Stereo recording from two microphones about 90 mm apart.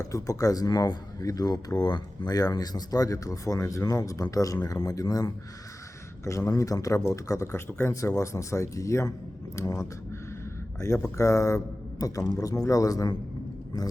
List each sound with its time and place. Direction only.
0.0 s a man's voice: 40° left (ahead or behind)